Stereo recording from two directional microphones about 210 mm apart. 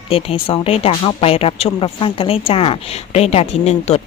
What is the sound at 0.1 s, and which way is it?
Speech, 25° left (ahead or behind).